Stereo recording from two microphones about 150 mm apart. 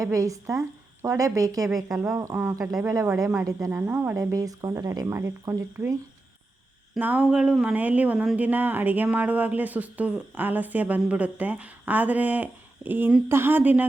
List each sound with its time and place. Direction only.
0.0 s a woman's voice: 20° right (ahead or behind)